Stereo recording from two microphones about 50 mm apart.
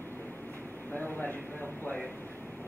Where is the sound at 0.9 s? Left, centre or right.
Left.